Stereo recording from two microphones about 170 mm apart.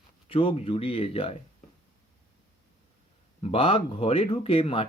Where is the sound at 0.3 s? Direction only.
35° left (ahead or behind).